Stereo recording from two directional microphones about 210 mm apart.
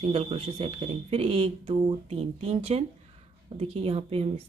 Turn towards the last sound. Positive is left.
turn(degrees=-30)  # may be behind; listen again after turning